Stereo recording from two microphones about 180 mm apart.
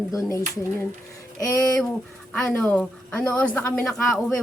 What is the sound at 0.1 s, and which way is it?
Speech, 15° left (ahead or behind).